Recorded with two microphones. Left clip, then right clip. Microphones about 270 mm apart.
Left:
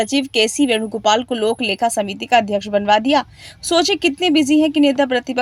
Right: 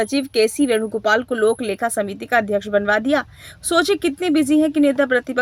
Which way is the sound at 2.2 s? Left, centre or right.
Left.